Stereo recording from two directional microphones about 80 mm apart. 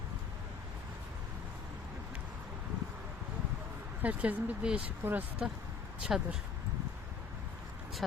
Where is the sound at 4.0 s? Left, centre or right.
Right.